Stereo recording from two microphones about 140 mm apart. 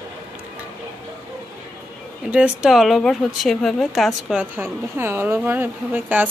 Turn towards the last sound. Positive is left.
turn(degrees=-10)  # may be behind; listen again after turning